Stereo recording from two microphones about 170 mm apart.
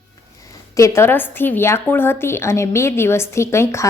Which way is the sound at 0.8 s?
15° left (ahead or behind).